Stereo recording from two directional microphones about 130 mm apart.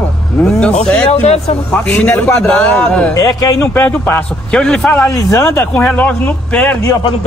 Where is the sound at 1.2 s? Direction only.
55° left (ahead or behind).